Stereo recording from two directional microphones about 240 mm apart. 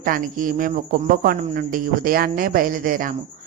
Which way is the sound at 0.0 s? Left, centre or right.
Right.